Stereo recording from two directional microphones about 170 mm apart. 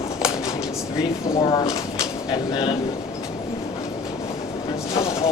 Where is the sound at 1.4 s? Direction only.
25° left (ahead or behind).